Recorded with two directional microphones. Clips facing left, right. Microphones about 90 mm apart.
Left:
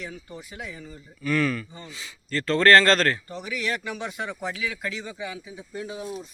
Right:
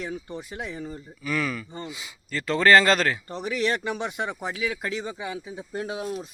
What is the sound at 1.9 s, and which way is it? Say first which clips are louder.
Speech: right 2 dB; 15° right (ahead or behind).